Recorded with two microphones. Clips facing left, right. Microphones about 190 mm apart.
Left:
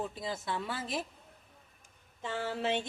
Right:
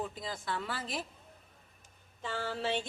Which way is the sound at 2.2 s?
20° left (ahead or behind).